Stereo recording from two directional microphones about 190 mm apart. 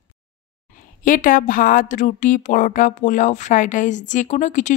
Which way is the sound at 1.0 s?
45° left (ahead or behind).